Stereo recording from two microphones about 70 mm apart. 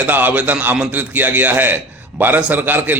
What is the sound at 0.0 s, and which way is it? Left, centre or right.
A man's voice, right.